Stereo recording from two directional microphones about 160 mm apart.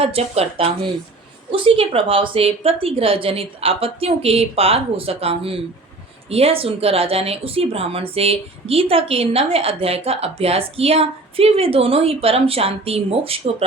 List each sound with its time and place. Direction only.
0.0 s a woman's voice: 40° right (ahead or behind)